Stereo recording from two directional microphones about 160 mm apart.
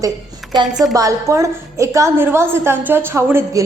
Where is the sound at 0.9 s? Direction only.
20° right (ahead or behind).